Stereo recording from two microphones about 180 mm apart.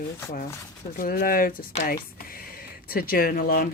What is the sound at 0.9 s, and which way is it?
Speech, 50° left (ahead or behind).